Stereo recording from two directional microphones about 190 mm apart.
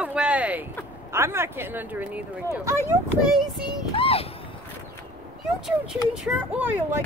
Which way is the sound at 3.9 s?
30° left (ahead or behind).